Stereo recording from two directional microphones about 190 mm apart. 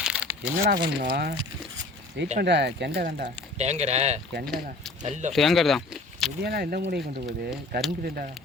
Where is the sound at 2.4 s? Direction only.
60° right (ahead or behind).